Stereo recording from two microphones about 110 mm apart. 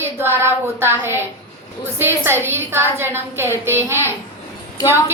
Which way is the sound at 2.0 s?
20° right (ahead or behind).